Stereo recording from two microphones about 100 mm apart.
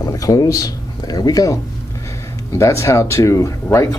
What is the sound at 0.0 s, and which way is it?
Speech, 35° left (ahead or behind).